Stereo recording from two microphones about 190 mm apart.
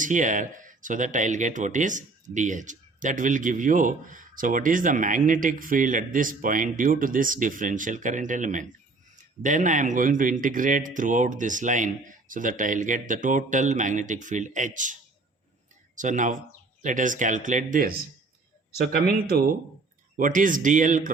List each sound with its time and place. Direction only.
0.0 s speech: 40° right (ahead or behind)
16.0 s speech: 40° right (ahead or behind)